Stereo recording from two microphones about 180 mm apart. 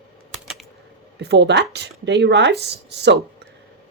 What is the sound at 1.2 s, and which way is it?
Speech, 70° right (ahead or behind).